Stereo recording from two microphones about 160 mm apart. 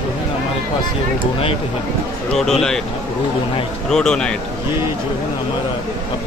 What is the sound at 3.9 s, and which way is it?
Speech, 5° left (ahead or behind).